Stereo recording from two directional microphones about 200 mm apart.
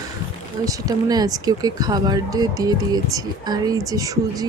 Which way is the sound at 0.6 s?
15° right (ahead or behind).